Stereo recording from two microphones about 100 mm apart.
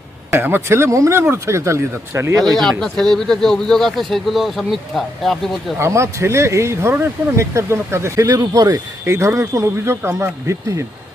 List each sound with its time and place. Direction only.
0.3 s speech: 20° right (ahead or behind)
2.6 s speech: 5° left (ahead or behind)
5.8 s speech: 30° right (ahead or behind)
9.0 s speech: 25° right (ahead or behind)